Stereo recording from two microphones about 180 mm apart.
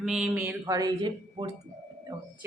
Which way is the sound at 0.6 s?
20° right (ahead or behind).